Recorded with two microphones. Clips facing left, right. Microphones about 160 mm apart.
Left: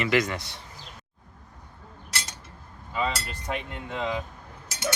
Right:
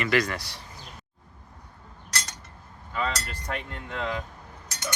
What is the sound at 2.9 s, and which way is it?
Speech, 10° left (ahead or behind).